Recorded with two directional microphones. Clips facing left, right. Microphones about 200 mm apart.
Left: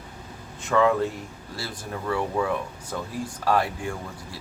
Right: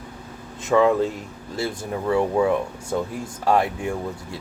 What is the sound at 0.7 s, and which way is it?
Speech, 20° right (ahead or behind).